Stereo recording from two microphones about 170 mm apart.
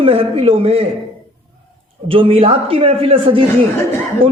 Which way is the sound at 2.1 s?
30° right (ahead or behind).